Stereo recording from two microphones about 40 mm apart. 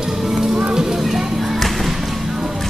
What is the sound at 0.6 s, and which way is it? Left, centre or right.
Music, right.